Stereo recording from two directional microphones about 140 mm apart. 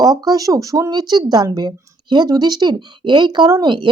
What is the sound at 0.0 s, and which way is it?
Speech, 25° right (ahead or behind).